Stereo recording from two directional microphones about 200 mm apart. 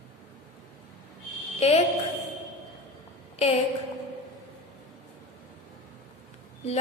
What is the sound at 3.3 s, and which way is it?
Speech, 30° left (ahead or behind).